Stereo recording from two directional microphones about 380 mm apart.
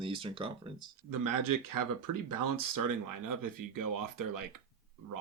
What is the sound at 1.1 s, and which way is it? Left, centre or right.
Speech, right.